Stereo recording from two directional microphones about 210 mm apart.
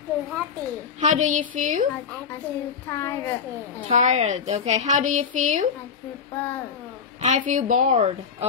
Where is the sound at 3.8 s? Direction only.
35° right (ahead or behind).